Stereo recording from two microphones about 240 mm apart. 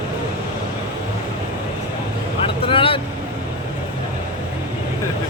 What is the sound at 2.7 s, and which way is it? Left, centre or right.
Vehicle, left.